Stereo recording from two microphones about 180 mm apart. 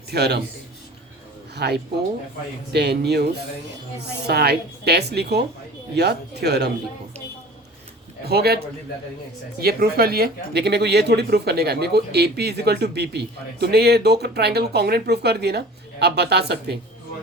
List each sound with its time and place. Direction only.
0.1 s a man's voice: 65° right (ahead or behind)
1.5 s speech: 65° right (ahead or behind)
8.2 s speech: 60° right (ahead or behind)
9.6 s speech: 60° right (ahead or behind)